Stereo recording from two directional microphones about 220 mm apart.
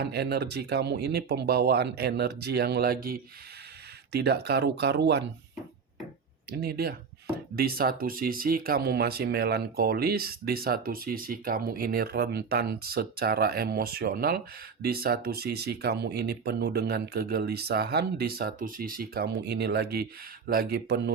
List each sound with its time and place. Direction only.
0.0 s speech: 45° right (ahead or behind)
6.5 s speech: 45° right (ahead or behind)